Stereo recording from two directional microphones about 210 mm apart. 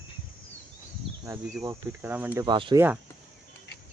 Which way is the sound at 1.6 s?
10° right (ahead or behind).